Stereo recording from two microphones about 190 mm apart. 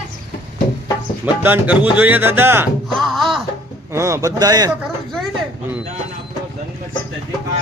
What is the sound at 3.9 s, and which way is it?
Speech, 15° right (ahead or behind).